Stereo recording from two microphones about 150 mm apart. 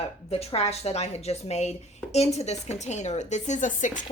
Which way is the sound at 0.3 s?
45° left (ahead or behind).